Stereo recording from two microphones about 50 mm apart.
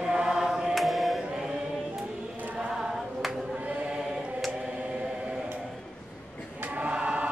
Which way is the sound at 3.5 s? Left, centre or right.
Right.